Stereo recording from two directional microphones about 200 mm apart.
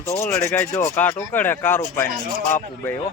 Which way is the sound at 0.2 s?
15° left (ahead or behind).